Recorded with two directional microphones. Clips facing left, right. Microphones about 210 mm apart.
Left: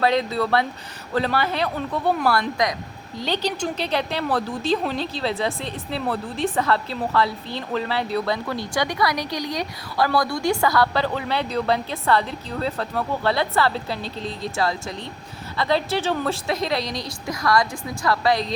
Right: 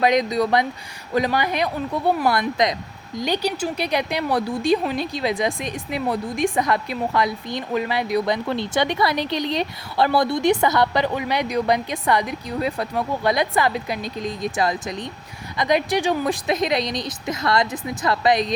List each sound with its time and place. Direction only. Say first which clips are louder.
0.0 s a woman's voice: right 2 dB; 15° right (ahead or behind)